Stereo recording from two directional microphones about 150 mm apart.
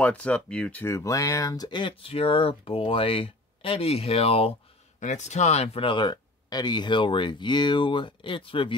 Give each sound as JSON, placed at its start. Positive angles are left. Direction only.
{"t": 0.0, "sound": "speech", "side_deg": 10}
{"t": 5.0, "sound": "speech", "side_deg": 50}